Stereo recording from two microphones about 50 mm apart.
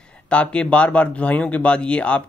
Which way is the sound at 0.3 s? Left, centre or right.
Left.